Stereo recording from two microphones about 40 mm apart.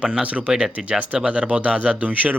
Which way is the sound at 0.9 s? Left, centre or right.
Right.